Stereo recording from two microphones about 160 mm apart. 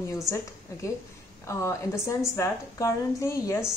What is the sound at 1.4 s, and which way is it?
A woman's voice, 20° left (ahead or behind).